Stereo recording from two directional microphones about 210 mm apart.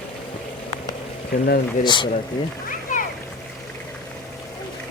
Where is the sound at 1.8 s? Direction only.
20° left (ahead or behind).